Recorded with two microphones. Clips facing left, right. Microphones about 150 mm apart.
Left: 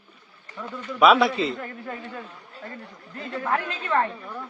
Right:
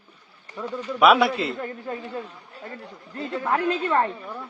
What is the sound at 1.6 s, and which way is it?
Speech, 25° right (ahead or behind).